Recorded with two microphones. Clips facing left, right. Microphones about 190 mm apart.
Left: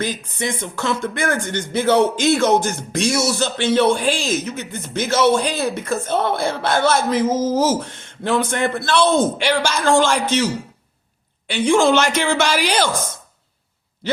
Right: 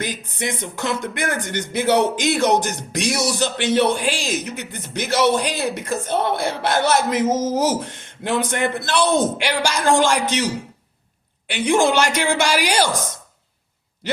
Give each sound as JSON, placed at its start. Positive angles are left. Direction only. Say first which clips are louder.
{"t": 0.0, "sound": "speech", "louder": "left 2 dB", "side_deg": -15}